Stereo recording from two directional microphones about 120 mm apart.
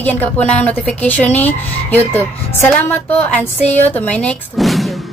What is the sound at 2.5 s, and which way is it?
A woman's voice, 15° left (ahead or behind).